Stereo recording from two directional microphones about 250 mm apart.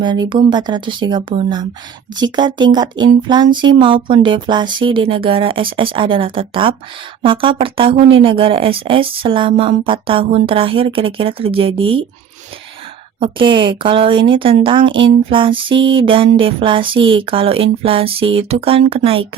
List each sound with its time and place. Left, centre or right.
0.0 s speech: centre
13.1 s speech: right